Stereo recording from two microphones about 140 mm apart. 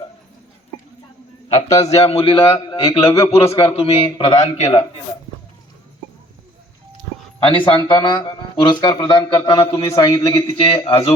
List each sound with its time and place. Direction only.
1.8 s a man's voice: 50° left (ahead or behind)
7.3 s a man's voice: 40° left (ahead or behind)